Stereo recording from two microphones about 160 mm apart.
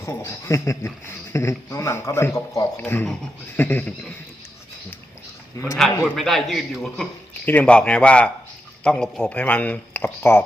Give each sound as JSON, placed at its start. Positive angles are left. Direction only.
{"t": 0.0, "sound": "a man's voice", "side_deg": 15}
{"t": 5.6, "sound": "a man's voice", "side_deg": 20}
{"t": 6.1, "sound": "a man's voice", "side_deg": 0}